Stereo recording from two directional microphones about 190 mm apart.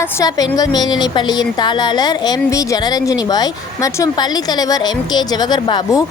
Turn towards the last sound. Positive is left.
turn(degrees=20)  # may be behind; listen again after turning